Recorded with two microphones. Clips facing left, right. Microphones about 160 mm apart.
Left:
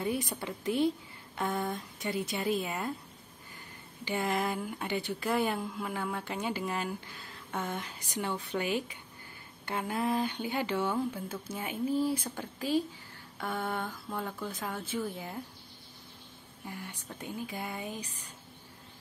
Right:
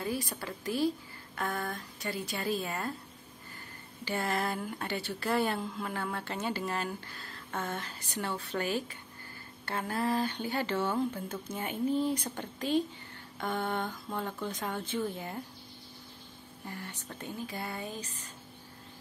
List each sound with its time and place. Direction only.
0.0 s speech: 20° left (ahead or behind)
4.0 s speech: 15° left (ahead or behind)
13.4 s a sound: 5° left (ahead or behind)
14.1 s speech: 5° left (ahead or behind)
16.6 s speech: 10° left (ahead or behind)